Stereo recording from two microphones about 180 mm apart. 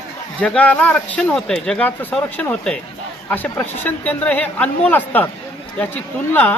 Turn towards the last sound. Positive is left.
turn(degrees=10)  # may be behind; listen again after turning